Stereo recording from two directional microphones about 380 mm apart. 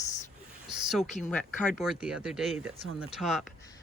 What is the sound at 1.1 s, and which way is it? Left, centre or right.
Speech, centre.